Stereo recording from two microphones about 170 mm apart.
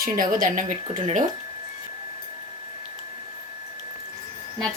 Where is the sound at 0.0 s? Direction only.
55° right (ahead or behind).